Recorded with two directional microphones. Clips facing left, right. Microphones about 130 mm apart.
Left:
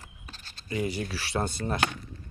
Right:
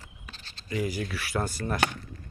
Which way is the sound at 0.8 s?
30° left (ahead or behind).